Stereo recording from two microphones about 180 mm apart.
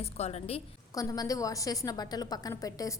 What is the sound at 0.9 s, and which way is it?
A woman's voice, 20° left (ahead or behind).